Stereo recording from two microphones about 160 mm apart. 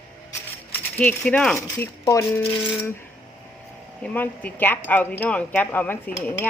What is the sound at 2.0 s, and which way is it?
Speech, 20° left (ahead or behind).